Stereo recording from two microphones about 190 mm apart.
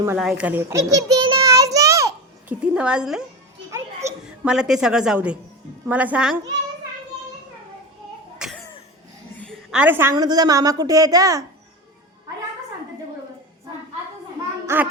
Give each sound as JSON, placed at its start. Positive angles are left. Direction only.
{"t": 0.2, "sound": "a sound", "side_deg": -5}
{"t": 3.7, "sound": "children playing", "side_deg": -15}
{"t": 4.3, "sound": "a woman's voice", "side_deg": -5}
{"t": 8.4, "sound": "cough", "side_deg": 0}
{"t": 9.7, "sound": "a woman's voice", "side_deg": -10}
{"t": 14.7, "sound": "a child's voice", "side_deg": -15}